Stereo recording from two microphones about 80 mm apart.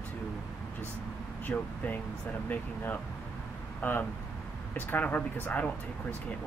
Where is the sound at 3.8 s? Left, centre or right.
Left.